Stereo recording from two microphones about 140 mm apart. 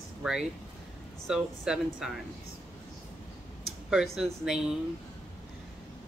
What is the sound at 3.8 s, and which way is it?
Speech, 5° right (ahead or behind).